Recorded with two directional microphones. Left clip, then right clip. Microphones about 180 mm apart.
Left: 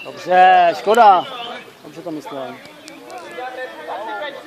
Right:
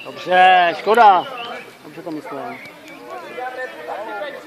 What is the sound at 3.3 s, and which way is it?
Chatter, 45° right (ahead or behind).